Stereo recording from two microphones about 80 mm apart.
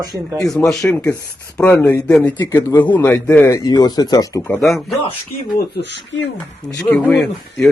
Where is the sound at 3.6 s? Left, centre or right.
Left.